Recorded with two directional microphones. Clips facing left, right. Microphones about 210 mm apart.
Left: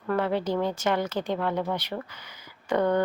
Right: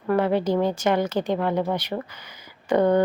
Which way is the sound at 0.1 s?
15° right (ahead or behind).